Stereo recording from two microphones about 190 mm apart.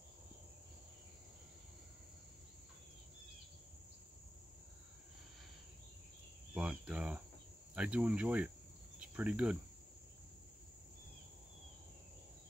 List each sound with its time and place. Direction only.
6.5 s cricket: 5° right (ahead or behind)
7.7 s speech: 5° right (ahead or behind)
9.0 s cricket: 5° right (ahead or behind)